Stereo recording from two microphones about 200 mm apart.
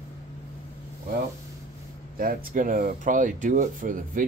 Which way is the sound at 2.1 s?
45° right (ahead or behind).